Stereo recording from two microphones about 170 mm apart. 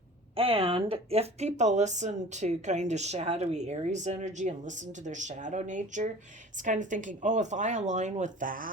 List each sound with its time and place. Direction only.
0.3 s speech: 35° right (ahead or behind); by 8.7 s 55° right (ahead or behind)